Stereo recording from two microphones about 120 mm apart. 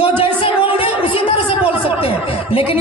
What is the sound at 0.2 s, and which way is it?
Music, 50° left (ahead or behind).